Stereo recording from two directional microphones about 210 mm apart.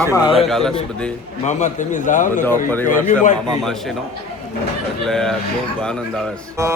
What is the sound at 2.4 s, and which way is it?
Speech, 10° left (ahead or behind).